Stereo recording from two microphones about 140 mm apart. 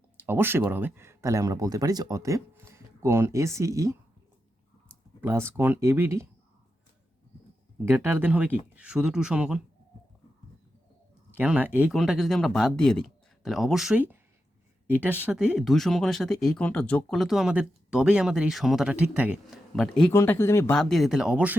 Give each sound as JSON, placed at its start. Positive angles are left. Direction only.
{"t": 0.2, "sound": "speech", "side_deg": -15}
{"t": 5.2, "sound": "speech", "side_deg": -20}
{"t": 7.9, "sound": "speech", "side_deg": -15}
{"t": 11.3, "sound": "speech", "side_deg": -10}
{"t": 11.9, "sound": "speech", "side_deg": 0}
{"t": 19.5, "sound": "speech", "side_deg": 0}
{"t": 20.1, "sound": "speech", "side_deg": 15}
{"t": 20.7, "sound": "speech", "side_deg": 0}